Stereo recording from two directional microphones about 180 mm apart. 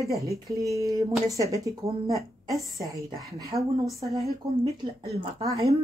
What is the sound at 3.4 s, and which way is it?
Speech, 20° right (ahead or behind).